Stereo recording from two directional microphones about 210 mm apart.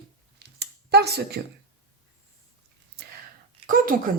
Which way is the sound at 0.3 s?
50° right (ahead or behind).